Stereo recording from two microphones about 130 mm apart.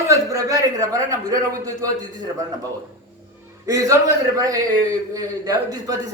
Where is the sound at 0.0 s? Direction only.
25° right (ahead or behind).